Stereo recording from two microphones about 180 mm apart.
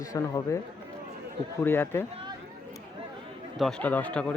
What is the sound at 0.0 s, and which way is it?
A man's voice, 20° left (ahead or behind).